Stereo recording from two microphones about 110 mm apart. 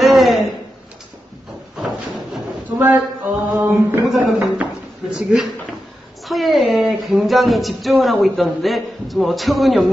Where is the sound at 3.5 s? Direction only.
20° right (ahead or behind).